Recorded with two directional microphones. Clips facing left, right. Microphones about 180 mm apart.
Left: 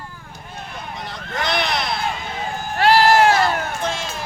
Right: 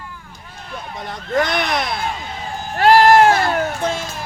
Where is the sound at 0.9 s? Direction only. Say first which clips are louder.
Right 10 dB; 50° right (ahead or behind).